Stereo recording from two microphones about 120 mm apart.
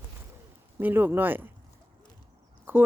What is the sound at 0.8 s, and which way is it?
Speech, 15° right (ahead or behind).